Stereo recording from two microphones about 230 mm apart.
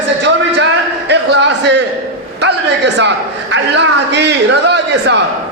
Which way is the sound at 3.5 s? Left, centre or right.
Right.